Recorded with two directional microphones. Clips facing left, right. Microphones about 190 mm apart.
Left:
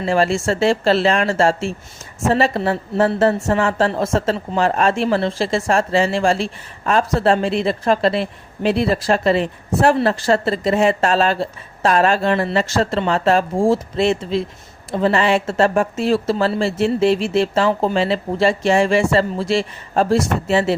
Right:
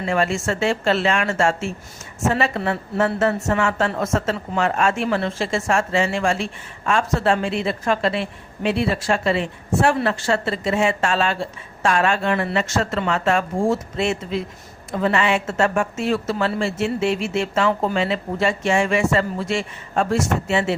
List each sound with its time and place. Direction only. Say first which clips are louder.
0.0 s a woman's voice: left 4 dB; 30° left (ahead or behind)